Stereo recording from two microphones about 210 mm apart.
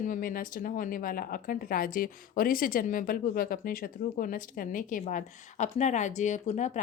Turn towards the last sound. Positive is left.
turn(degrees=35)  # may be behind; listen again after turning